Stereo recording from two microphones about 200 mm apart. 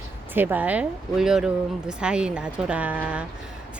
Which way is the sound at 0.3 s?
10° right (ahead or behind).